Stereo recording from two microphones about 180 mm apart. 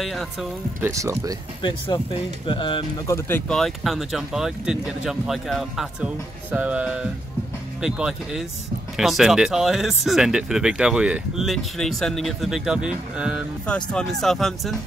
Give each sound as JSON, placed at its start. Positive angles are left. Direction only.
{"t": 0.0, "sound": "speech", "side_deg": 0}
{"t": 0.7, "sound": "speech", "side_deg": -15}
{"t": 1.6, "sound": "speech", "side_deg": 25}
{"t": 13.7, "sound": "speech", "side_deg": 5}